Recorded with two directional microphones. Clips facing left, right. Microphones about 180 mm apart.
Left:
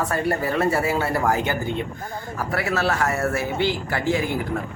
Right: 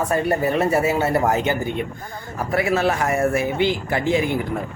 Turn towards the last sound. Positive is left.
turn(degrees=-20)  # may be behind; listen again after turning